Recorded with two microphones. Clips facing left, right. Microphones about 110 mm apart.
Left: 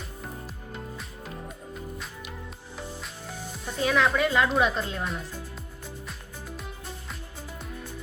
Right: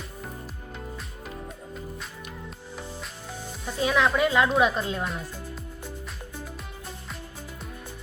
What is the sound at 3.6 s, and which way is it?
Speech, 5° right (ahead or behind).